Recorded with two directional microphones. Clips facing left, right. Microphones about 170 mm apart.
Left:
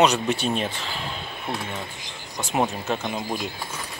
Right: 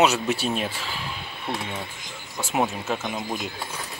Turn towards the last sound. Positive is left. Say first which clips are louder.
# left 1 dB
turn(degrees=0)  # may be behind; listen again after turning